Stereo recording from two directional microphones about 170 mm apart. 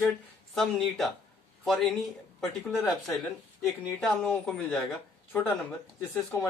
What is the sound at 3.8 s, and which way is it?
Speech, centre (ahead or behind).